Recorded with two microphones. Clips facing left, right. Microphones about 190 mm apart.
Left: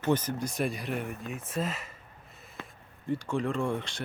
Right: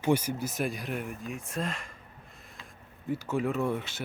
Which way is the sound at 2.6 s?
60° left (ahead or behind).